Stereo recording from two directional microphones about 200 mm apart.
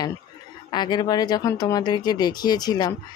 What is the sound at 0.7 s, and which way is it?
Speech, 20° left (ahead or behind).